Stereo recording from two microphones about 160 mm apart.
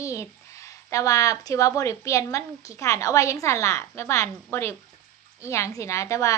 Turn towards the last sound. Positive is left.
turn(degrees=20)  # may be behind; listen again after turning